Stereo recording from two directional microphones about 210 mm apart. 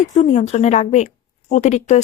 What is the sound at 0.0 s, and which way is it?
A woman's voice, 35° left (ahead or behind).